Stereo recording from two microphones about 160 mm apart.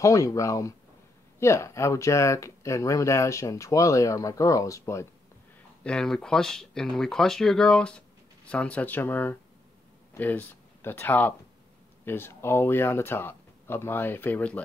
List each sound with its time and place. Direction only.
0.0 s speech: 20° left (ahead or behind)
5.9 s speech: 5° left (ahead or behind)